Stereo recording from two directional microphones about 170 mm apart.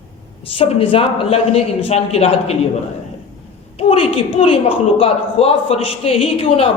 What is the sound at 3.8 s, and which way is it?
A woman's voice, 35° left (ahead or behind).